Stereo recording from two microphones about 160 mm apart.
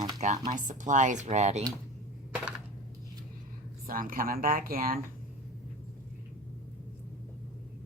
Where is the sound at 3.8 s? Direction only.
60° right (ahead or behind).